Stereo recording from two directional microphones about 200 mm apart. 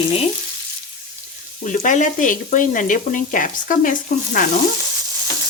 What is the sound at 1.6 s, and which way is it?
Frying, 40° left (ahead or behind).